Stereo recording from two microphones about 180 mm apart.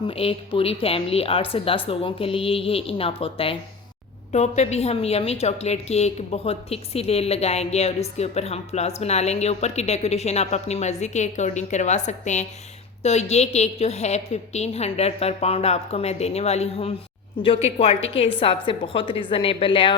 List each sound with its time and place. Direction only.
0.1 s a woman's voice: 30° left (ahead or behind)